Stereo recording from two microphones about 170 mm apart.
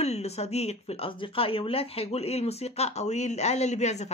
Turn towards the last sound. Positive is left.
turn(degrees=40)  # may be behind; listen again after turning